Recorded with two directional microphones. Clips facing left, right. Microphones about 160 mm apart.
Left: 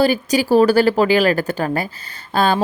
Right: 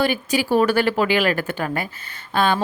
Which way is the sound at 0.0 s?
40° left (ahead or behind).